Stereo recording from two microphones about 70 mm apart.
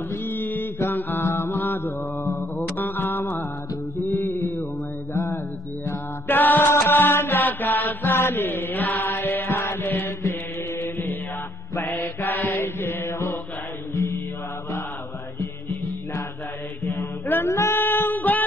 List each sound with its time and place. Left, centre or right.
0.1 s mantra: left
5.9 s music: left
6.7 s mantra: left
10.8 s chant: left
11.7 s mantra: left
15.3 s music: left
16.8 s a sound: left